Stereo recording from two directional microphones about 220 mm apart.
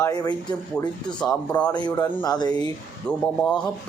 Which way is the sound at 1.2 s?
5° left (ahead or behind).